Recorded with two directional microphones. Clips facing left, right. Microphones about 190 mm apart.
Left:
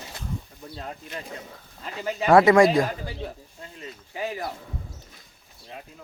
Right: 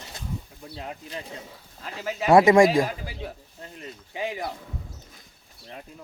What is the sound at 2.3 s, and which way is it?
Speech, 20° right (ahead or behind).